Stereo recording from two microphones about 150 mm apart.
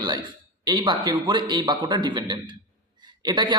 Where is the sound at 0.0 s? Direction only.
25° right (ahead or behind).